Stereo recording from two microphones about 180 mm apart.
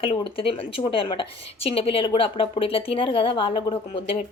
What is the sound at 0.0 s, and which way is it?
A woman's voice, 30° left (ahead or behind).